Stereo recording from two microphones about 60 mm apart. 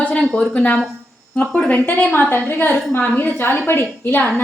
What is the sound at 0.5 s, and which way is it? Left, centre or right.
A woman's voice, left.